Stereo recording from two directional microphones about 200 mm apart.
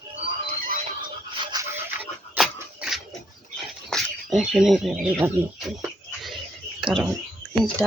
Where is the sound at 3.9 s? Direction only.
Centre (ahead or behind).